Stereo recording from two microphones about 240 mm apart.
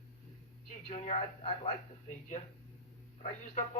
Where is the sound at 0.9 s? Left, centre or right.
Left.